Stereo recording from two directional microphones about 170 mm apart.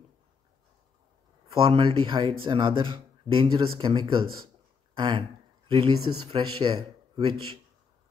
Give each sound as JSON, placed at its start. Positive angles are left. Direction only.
{"t": 1.5, "sound": "speech", "side_deg": -35}